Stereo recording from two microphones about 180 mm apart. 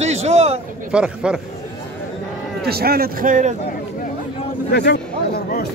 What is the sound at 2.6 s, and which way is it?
Speech, 60° right (ahead or behind).